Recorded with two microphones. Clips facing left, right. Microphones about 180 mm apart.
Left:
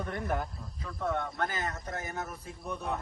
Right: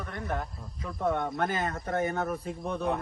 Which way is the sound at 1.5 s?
60° right (ahead or behind).